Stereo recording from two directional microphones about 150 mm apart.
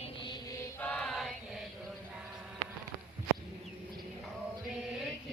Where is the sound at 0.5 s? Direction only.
20° left (ahead or behind).